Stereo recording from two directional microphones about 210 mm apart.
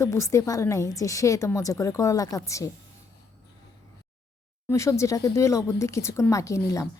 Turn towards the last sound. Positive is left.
turn(degrees=15)  # may be behind; listen again after turning